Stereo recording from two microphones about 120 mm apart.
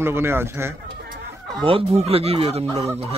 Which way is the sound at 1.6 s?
55° right (ahead or behind).